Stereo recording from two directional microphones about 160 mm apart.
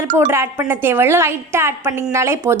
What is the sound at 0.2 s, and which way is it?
A woman's voice, 15° right (ahead or behind).